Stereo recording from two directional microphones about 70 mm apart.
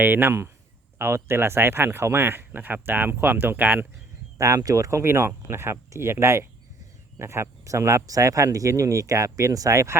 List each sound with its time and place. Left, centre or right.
0.0 s speech: right
4.4 s speech: right